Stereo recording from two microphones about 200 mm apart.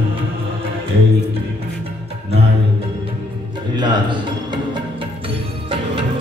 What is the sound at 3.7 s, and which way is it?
Music, 20° right (ahead or behind).